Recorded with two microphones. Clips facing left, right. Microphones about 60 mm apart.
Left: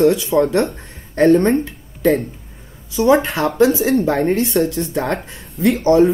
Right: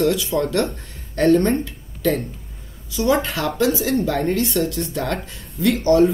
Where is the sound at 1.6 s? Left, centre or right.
Left.